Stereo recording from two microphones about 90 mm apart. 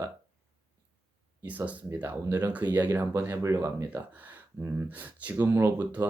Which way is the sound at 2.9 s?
30° right (ahead or behind).